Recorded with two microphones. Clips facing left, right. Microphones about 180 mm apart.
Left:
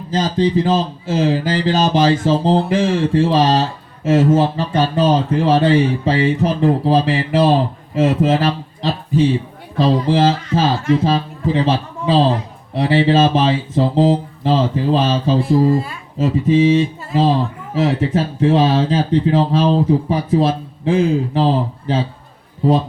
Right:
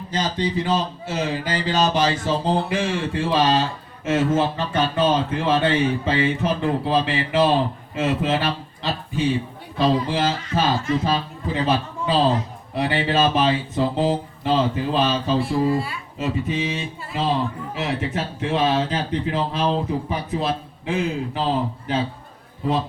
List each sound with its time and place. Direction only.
0.1 s a man's voice: 35° left (ahead or behind)